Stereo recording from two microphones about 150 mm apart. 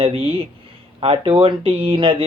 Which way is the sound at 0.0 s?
40° right (ahead or behind).